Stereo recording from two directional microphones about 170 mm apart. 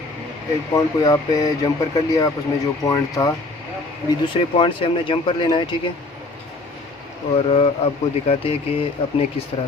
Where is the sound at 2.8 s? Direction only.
20° left (ahead or behind).